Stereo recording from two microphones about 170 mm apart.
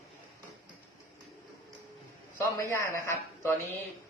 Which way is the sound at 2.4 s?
20° left (ahead or behind).